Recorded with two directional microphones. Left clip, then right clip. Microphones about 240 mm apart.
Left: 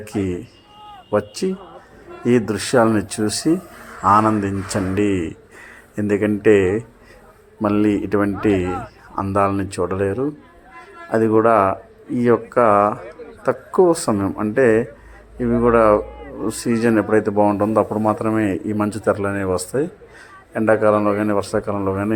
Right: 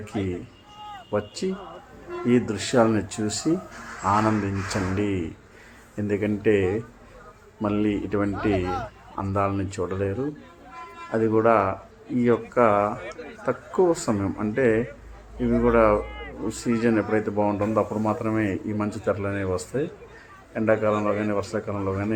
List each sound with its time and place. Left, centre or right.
1.1 s speech: centre